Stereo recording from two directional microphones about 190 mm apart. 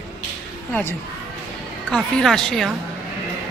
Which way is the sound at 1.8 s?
Centre (ahead or behind).